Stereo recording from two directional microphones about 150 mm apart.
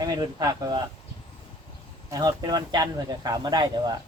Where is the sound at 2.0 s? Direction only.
25° right (ahead or behind).